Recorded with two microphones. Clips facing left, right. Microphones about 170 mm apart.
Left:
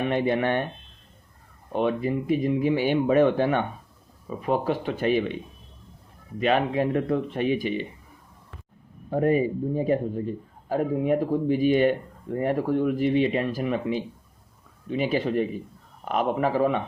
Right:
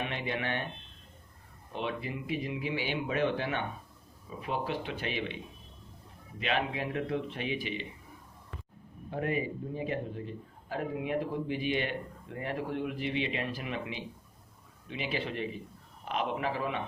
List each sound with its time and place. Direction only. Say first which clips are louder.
0.0 s a man's voice: left 11 dB; 50° left (ahead or behind)
1.7 s a man's voice: left 11 dB; 45° left (ahead or behind)
6.4 s a man's voice: left 10 dB; 45° left (ahead or behind)
9.0 s a man's voice: left 10 dB; 40° left (ahead or behind)